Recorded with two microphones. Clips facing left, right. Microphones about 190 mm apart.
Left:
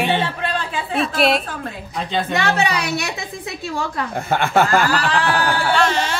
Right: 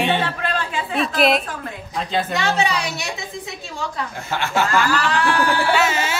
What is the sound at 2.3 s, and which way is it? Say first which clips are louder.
A woman's voice: left 3 dB; 60° left (ahead or behind).